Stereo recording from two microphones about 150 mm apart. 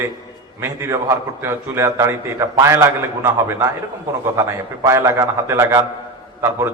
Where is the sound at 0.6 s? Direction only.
15° right (ahead or behind).